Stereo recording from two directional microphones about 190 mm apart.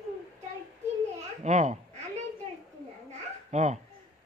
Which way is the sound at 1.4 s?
40° right (ahead or behind).